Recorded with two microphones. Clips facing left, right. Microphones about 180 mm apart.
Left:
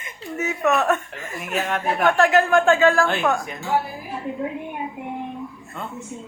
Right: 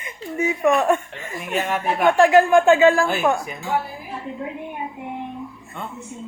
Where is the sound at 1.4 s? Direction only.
Centre (ahead or behind).